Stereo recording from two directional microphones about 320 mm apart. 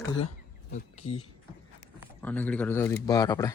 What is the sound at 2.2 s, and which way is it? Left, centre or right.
Speech, centre.